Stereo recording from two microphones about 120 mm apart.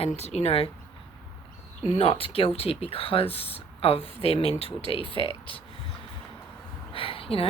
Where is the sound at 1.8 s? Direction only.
55° left (ahead or behind).